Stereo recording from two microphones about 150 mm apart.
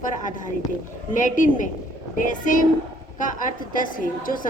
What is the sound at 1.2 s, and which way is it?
A man's voice, 60° left (ahead or behind).